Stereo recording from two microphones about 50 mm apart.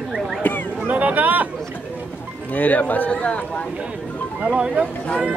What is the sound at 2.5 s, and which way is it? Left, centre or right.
Speech, left.